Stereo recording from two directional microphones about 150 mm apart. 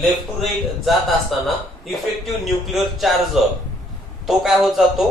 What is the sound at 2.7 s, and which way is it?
Speech, centre (ahead or behind).